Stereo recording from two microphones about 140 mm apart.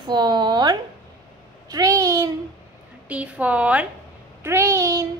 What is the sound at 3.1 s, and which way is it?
A woman's voice, 10° right (ahead or behind).